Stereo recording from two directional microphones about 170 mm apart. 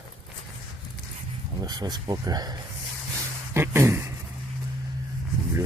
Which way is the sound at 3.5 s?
15° right (ahead or behind).